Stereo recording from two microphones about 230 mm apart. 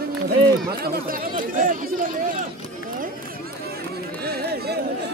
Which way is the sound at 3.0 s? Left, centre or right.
Right.